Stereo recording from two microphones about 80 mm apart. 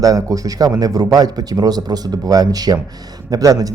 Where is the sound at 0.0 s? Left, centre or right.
Right.